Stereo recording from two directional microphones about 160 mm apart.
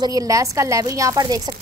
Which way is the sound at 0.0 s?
20° right (ahead or behind).